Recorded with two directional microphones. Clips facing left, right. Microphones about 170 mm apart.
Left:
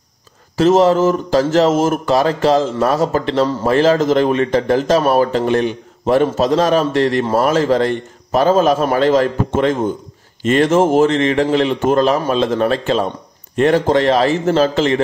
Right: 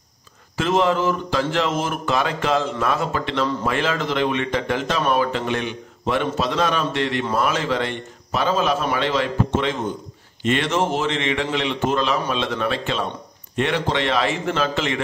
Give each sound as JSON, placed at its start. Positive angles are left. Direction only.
{"t": 0.6, "sound": "a man's voice", "side_deg": 40}